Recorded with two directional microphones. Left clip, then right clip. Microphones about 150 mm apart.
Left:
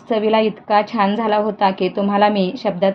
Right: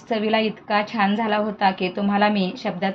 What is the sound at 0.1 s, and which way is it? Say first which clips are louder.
A woman's voice: left 5 dB; 40° left (ahead or behind).